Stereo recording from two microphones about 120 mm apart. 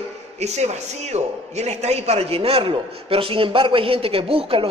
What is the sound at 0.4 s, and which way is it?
A man's voice, 65° right (ahead or behind).